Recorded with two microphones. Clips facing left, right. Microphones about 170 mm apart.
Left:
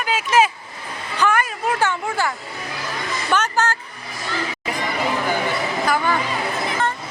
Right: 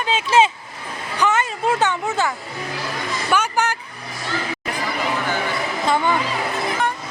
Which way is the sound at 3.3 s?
10° right (ahead or behind).